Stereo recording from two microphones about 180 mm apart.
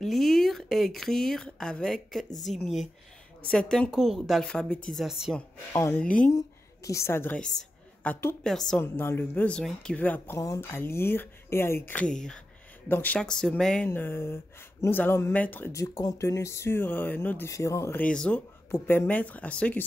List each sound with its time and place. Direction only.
0.0 s speech: centre (ahead or behind)
5.7 s a woman's voice: 15° left (ahead or behind)